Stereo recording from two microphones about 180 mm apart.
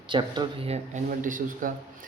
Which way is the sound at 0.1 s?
25° right (ahead or behind).